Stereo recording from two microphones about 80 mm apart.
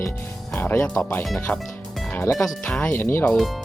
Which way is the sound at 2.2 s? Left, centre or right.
Left.